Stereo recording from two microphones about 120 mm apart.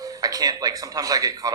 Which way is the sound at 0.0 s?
30° right (ahead or behind).